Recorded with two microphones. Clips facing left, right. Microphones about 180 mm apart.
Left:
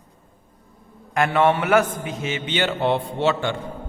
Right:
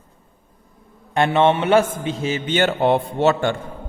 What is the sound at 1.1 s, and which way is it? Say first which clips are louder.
A man's voice: right 2 dB; 25° right (ahead or behind).